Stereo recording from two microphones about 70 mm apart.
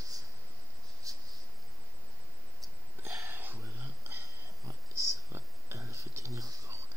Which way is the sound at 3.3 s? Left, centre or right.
Right.